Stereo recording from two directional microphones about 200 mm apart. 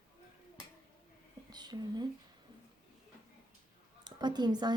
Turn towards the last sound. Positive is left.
turn(degrees=-20)  # may be behind; listen again after turning